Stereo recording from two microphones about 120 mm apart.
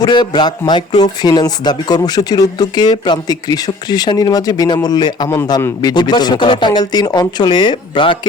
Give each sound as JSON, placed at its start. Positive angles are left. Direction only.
{"t": 0.0, "sound": "speech", "side_deg": 35}